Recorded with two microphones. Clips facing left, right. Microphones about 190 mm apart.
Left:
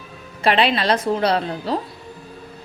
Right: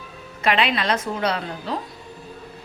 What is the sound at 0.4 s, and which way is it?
A woman's voice, 30° left (ahead or behind).